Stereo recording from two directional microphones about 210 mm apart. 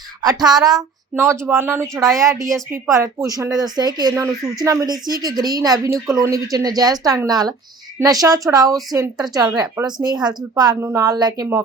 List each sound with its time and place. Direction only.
0.2 s a woman's voice: 20° right (ahead or behind)